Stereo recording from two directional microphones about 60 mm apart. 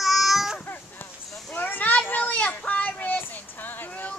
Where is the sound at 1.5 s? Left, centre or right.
Left.